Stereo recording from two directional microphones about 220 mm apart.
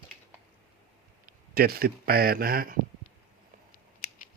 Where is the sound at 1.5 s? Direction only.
45° right (ahead or behind).